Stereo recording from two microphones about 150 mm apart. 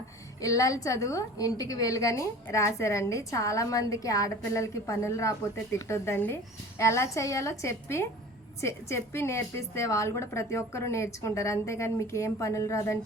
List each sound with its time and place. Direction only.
0.4 s a woman's voice: 20° left (ahead or behind)